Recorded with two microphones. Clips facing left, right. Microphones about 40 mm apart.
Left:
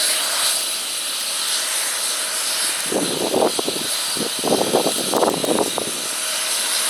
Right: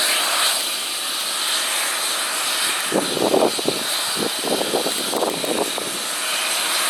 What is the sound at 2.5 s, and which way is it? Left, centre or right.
Vehicle, right.